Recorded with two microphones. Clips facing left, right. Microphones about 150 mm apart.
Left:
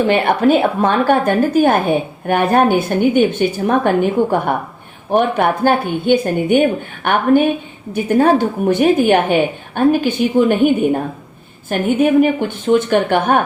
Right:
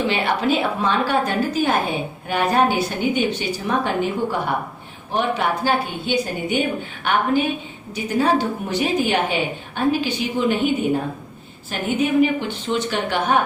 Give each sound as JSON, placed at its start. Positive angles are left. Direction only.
{"t": 0.1, "sound": "a woman's voice", "side_deg": 50}